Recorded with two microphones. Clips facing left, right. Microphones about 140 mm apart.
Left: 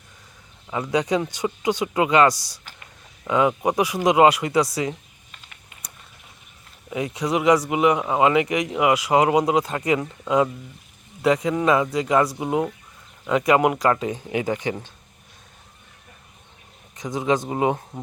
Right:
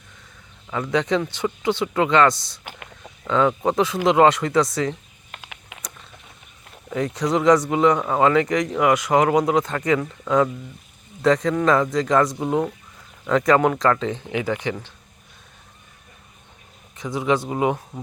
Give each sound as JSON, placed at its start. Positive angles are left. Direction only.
{"t": 0.7, "sound": "speech", "side_deg": 15}
{"t": 5.3, "sound": "typing", "side_deg": -85}
{"t": 6.9, "sound": "speech", "side_deg": 10}
{"t": 17.0, "sound": "speech", "side_deg": 20}